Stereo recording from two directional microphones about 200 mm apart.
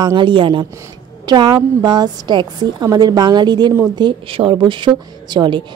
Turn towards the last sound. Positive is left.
turn(degrees=-25)  # may be behind; listen again after turning